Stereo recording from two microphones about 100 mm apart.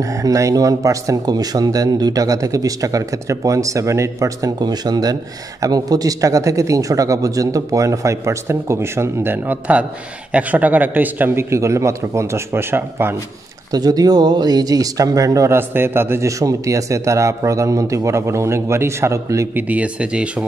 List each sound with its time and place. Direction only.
0.0 s a man's voice: 35° right (ahead or behind)
13.7 s speech: 40° right (ahead or behind)
19.5 s speech: 15° right (ahead or behind)